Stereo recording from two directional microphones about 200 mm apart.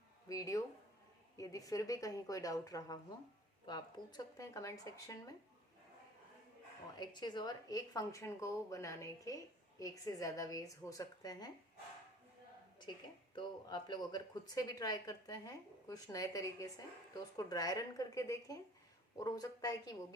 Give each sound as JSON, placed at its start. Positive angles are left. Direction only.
{"t": 0.3, "sound": "a woman's voice", "side_deg": 15}
{"t": 7.0, "sound": "a woman's voice", "side_deg": 20}
{"t": 13.3, "sound": "a woman's voice", "side_deg": 20}